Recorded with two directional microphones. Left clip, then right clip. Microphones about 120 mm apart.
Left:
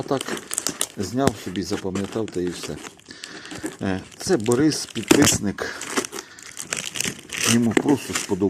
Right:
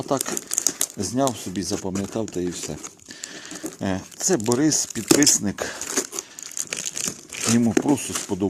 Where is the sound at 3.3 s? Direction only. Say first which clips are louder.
Left 3 dB; 35° right (ahead or behind).